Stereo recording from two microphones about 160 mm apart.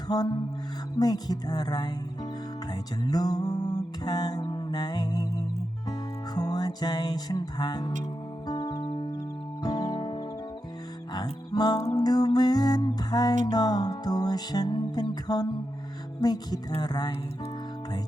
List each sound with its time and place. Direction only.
0.1 s music: 25° left (ahead or behind)